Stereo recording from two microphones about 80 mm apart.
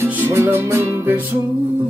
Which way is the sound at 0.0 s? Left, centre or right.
Right.